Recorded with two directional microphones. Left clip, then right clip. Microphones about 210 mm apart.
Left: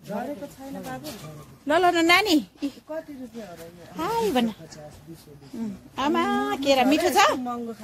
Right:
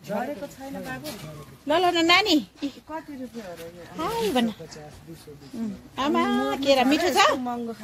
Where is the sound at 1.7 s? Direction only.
10° left (ahead or behind).